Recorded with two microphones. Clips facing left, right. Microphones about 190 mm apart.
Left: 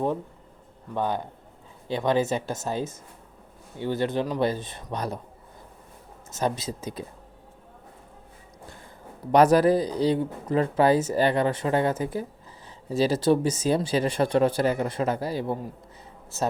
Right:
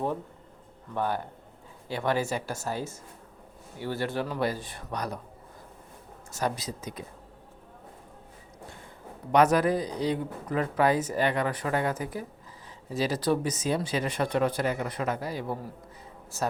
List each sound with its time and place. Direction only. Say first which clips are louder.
0.9 s speech: left 2 dB; 20° left (ahead or behind)
6.3 s speech: left 3 dB; 25° left (ahead or behind)
9.3 s speech: left 4 dB; 35° left (ahead or behind)